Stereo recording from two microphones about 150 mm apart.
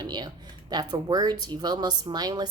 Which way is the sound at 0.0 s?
30° right (ahead or behind).